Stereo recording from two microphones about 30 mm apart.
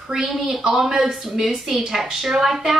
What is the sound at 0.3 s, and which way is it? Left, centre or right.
A woman's voice, centre.